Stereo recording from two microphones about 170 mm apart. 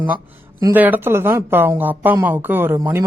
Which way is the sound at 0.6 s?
10° right (ahead or behind).